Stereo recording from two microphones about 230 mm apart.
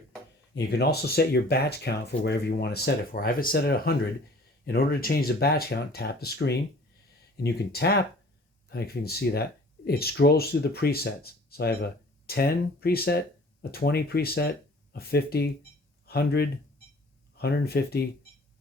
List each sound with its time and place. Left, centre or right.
0.5 s speech: left